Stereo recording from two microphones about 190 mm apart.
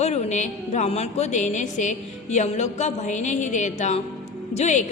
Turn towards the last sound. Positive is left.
turn(degrees=40)  # may be behind; listen again after turning